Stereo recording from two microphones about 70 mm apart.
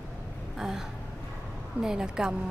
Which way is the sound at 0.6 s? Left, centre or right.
Centre.